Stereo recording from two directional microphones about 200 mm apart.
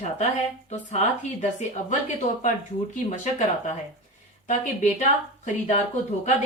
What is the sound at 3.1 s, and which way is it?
Speech, 35° left (ahead or behind).